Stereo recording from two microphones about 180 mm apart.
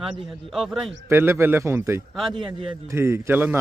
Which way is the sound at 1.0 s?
15° right (ahead or behind).